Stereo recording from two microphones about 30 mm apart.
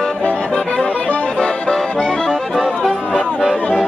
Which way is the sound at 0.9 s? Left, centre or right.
Left.